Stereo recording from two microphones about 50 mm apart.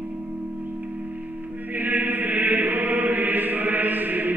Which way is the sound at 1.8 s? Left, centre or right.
Right.